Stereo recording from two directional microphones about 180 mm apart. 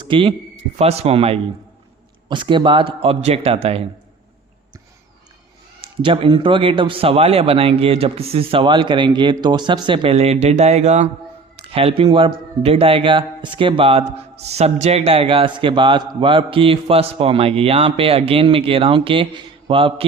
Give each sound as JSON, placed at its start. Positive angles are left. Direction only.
{"t": 0.1, "sound": "a man's voice", "side_deg": -30}
{"t": 5.8, "sound": "a man's voice", "side_deg": -30}